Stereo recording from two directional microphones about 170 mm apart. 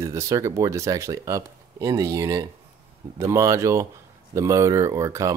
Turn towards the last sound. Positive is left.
turn(degrees=-15)  # may be behind; listen again after turning